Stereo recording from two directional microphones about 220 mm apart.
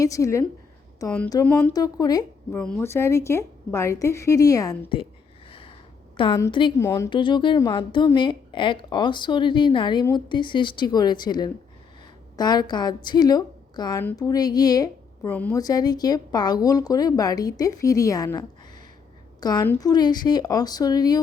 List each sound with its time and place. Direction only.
0.0 s a woman's voice: 15° left (ahead or behind)
2.6 s a woman's voice: 5° left (ahead or behind)
5.5 s a sound: 25° left (ahead or behind)
6.1 s a woman's voice: 25° left (ahead or behind)